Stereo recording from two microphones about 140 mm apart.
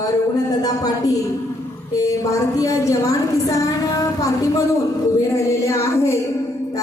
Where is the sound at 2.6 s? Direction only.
25° left (ahead or behind).